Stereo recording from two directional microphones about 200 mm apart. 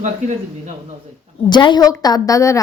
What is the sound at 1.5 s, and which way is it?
A woman's voice, 20° left (ahead or behind).